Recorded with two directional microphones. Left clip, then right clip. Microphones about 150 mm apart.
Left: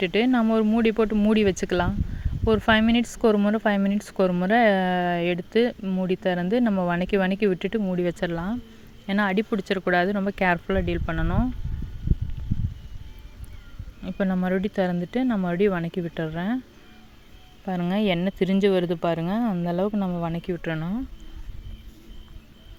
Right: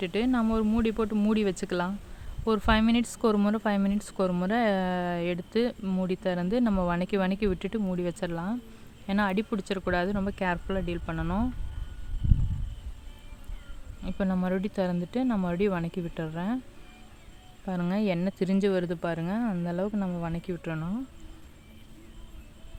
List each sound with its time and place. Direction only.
0.0 s speech: 25° left (ahead or behind)
14.0 s speech: 10° left (ahead or behind)
17.7 s speech: 15° left (ahead or behind)